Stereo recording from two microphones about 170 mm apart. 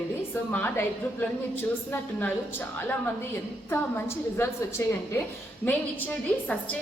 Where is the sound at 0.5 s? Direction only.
10° left (ahead or behind).